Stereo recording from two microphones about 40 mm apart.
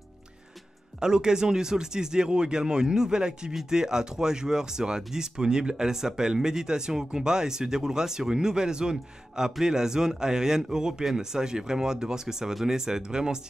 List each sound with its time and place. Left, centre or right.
0.9 s speech: centre